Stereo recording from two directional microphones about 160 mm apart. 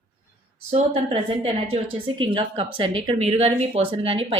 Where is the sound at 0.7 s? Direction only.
35° right (ahead or behind).